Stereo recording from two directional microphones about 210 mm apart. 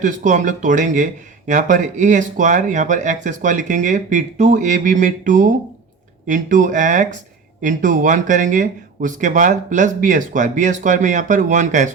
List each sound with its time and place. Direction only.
0.0 s speech: 40° right (ahead or behind)